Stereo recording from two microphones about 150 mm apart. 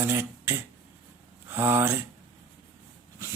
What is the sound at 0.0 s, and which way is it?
Speech, 15° right (ahead or behind).